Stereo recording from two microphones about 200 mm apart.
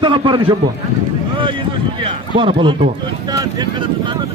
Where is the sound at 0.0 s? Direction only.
25° right (ahead or behind).